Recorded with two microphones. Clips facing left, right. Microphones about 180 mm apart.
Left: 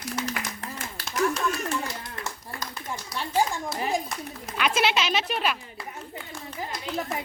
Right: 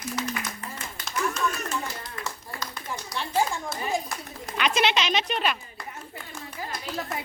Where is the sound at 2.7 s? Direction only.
5° left (ahead or behind).